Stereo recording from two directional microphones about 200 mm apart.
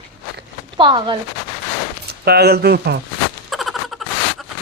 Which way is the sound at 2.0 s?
55° right (ahead or behind).